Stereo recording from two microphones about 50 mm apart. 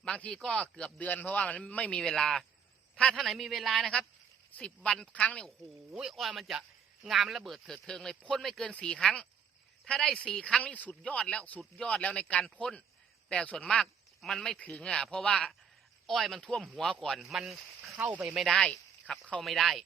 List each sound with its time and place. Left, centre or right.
0.0 s speech: centre
0.9 s speech: left
2.0 s a man's voice: centre
4.6 s speech: centre
5.9 s speech: centre
7.9 s speech: centre
12.5 s speech: centre
14.2 s speech: centre
16.0 s speech: centre
17.2 s speech: centre
18.0 s speech: right
18.6 s speech: centre
19.4 s speech: centre